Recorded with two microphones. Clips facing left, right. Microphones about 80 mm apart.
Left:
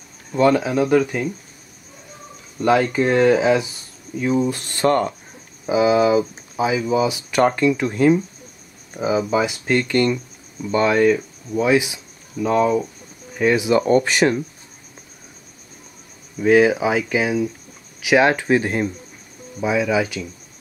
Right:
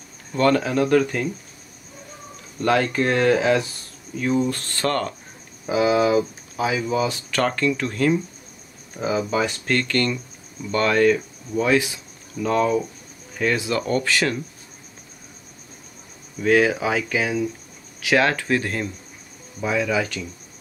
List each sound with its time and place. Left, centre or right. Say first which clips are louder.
0.3 s speech: left 3 dB; centre
2.6 s speech: left 3 dB; centre
5.7 s speech: left 3 dB; centre
16.3 s speech: left 4 dB; centre